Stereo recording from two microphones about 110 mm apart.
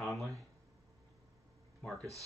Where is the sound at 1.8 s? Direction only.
15° left (ahead or behind).